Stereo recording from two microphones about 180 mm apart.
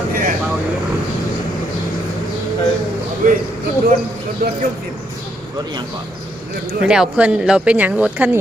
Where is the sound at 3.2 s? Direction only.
50° right (ahead or behind).